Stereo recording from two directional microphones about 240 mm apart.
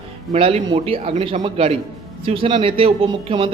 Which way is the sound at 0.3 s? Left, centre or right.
Right.